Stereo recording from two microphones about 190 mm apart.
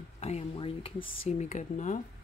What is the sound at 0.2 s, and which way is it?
Speech, 35° left (ahead or behind).